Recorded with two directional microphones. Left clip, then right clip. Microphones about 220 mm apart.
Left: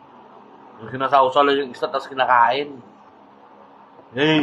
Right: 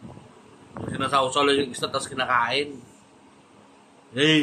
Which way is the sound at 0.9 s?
20° right (ahead or behind).